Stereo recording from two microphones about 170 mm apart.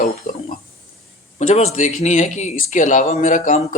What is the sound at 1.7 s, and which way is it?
Speech, 50° left (ahead or behind).